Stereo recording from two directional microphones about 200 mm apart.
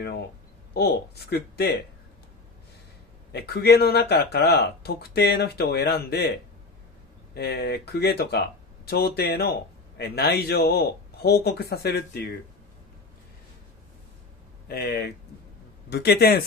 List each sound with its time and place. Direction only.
0.7 s speech: 55° left (ahead or behind)
3.3 s speech: 55° left (ahead or behind)
7.3 s speech: 50° left (ahead or behind)
14.7 s speech: 55° left (ahead or behind)